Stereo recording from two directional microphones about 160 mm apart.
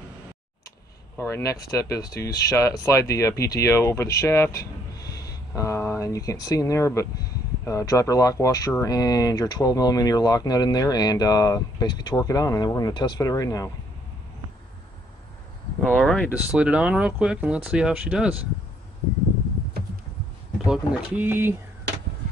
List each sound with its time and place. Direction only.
1.1 s speech: 15° left (ahead or behind)
15.8 s speech: 5° left (ahead or behind)
16.3 s speech: 5° right (ahead or behind)
20.5 s speech: 5° right (ahead or behind)